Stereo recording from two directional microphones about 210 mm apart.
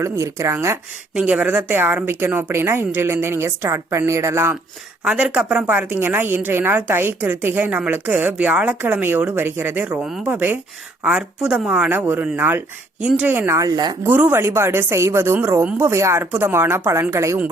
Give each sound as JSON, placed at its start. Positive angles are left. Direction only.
{"t": 0.0, "sound": "speech", "side_deg": -15}